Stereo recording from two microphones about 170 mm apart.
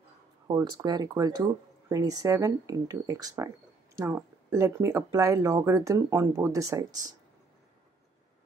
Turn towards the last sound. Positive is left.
turn(degrees=-20)  # may be behind; listen again after turning